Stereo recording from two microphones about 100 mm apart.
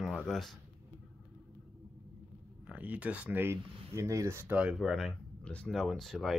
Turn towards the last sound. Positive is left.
turn(degrees=0)  # may be behind; listen again after turning